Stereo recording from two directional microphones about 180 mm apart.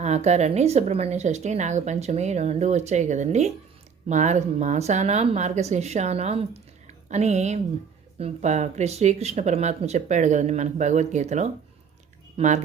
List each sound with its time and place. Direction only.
0.0 s a woman's voice: 40° right (ahead or behind)